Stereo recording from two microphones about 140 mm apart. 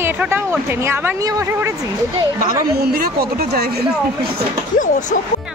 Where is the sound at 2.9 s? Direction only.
90° right.